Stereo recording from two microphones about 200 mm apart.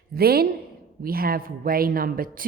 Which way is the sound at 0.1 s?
50° right (ahead or behind).